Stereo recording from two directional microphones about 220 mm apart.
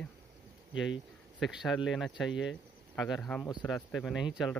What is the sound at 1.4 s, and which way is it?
Speech, centre (ahead or behind).